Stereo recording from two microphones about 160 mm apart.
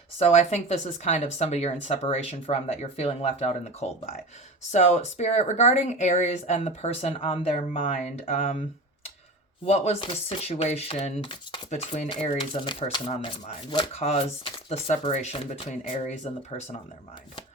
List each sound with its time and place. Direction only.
0.2 s speech: 45° left (ahead or behind)
7.8 s speech: 55° left (ahead or behind)
8.2 s speech: 40° left (ahead or behind)
9.6 s speech: 40° left (ahead or behind)